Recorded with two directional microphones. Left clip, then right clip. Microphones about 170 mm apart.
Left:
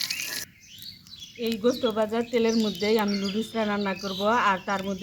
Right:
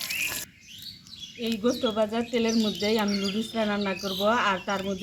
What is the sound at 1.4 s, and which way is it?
Speech, 20° left (ahead or behind).